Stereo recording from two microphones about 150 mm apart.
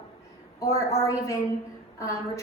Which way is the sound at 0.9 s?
20° left (ahead or behind).